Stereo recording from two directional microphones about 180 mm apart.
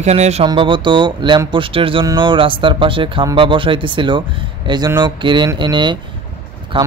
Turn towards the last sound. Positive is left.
turn(degrees=-30)  # may be behind; listen again after turning